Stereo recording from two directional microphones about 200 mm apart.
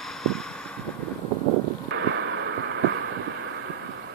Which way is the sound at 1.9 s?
65° right (ahead or behind).